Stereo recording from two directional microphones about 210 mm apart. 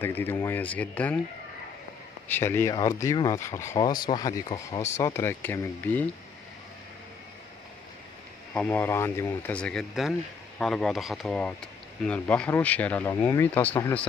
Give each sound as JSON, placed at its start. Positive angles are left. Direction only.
{"t": 0.0, "sound": "speech", "side_deg": 10}
{"t": 2.2, "sound": "speech", "side_deg": 10}
{"t": 8.5, "sound": "speech", "side_deg": 10}